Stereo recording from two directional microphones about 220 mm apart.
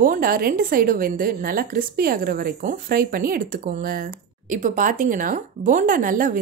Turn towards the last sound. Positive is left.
turn(degrees=-40)  # may be behind; listen again after turning